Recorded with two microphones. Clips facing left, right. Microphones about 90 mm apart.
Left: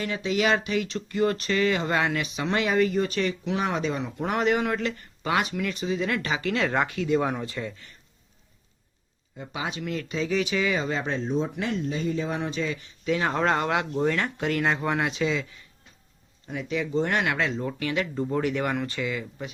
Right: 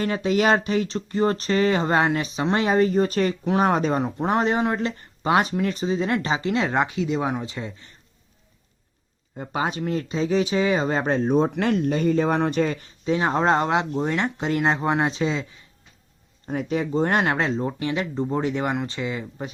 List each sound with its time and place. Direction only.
0.0 s speech: 40° right (ahead or behind)
4.2 s speech: 30° right (ahead or behind)
9.4 s speech: 45° right (ahead or behind)
13.1 s speech: 25° right (ahead or behind)
16.5 s speech: 40° right (ahead or behind)